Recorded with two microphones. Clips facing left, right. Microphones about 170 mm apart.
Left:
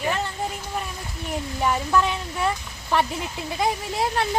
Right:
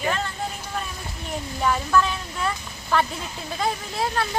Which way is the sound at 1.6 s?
15° left (ahead or behind).